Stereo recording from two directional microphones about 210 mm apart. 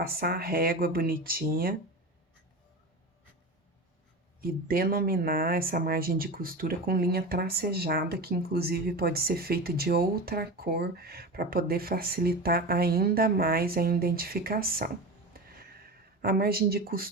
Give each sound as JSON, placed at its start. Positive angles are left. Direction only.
{"t": 0.0, "sound": "speech", "side_deg": -45}
{"t": 4.4, "sound": "speech", "side_deg": -45}
{"t": 15.3, "sound": "a sound", "side_deg": -45}